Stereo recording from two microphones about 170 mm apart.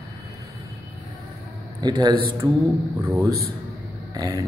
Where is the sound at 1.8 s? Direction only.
25° right (ahead or behind).